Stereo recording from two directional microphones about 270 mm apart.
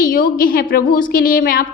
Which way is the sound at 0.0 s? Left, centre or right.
Left.